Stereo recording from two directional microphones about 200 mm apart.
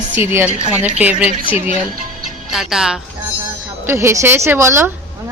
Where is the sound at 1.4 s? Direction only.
25° left (ahead or behind).